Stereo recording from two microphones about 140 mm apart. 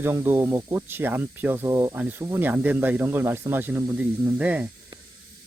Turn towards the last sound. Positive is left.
turn(degrees=-10)  # may be behind; listen again after turning